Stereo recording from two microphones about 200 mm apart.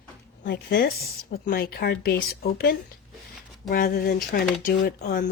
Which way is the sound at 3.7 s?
45° left (ahead or behind).